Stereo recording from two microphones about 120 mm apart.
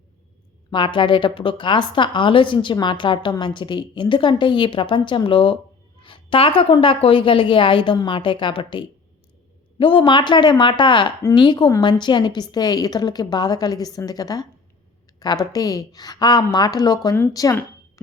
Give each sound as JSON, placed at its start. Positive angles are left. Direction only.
{"t": 0.7, "sound": "a woman's voice", "side_deg": 45}